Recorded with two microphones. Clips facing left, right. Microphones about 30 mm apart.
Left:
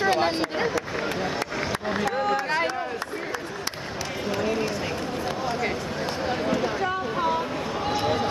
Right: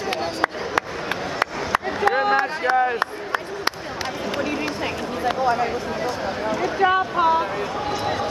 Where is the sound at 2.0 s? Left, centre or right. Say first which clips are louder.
Right 7 dB; right.